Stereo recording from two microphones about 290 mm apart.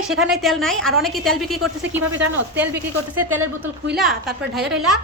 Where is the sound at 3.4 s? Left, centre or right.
Right.